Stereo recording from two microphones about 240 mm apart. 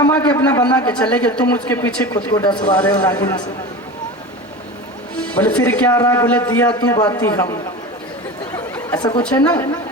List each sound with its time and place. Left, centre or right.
0.0 s speech: centre
2.6 s speech: centre
5.1 s a man's voice: centre
8.5 s a sound: centre
9.0 s a woman's voice: centre
9.2 s a man's voice: centre